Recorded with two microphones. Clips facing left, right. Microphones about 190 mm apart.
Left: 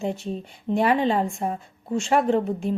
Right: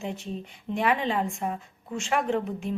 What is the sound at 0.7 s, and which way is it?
A woman's voice, 35° left (ahead or behind).